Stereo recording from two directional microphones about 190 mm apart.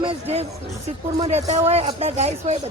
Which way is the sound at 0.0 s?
30° right (ahead or behind).